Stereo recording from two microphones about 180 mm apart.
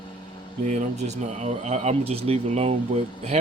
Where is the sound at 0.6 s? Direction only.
40° right (ahead or behind).